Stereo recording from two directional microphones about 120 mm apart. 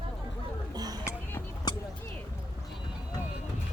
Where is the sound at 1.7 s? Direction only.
35° left (ahead or behind).